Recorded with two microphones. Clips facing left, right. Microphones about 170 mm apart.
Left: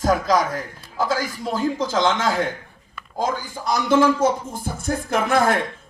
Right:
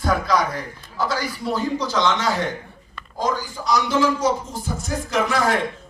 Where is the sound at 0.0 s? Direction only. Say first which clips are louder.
Left 2 dB; 45° left (ahead or behind).